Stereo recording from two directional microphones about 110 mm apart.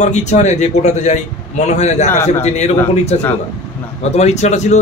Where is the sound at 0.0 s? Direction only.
90° left.